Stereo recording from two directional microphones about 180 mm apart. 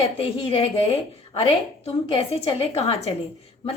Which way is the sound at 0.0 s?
30° left (ahead or behind).